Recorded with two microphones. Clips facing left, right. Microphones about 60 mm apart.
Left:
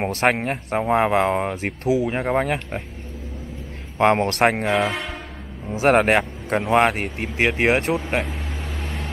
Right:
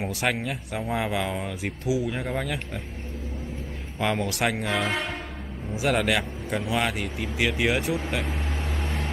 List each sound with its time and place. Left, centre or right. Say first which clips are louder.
0.0 s speech: left 7 dB; left
4.0 s speech: left 9 dB; left
4.8 s speech: left 2 dB; centre
5.8 s speech: left 8 dB; left
8.3 s a sound: even; centre